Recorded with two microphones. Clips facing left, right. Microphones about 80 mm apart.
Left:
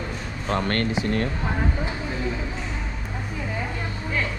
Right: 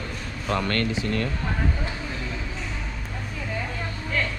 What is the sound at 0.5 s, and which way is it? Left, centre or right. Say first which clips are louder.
Speech: left 1 dB; left.